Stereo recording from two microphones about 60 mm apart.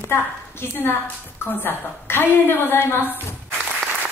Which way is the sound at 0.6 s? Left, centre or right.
Left.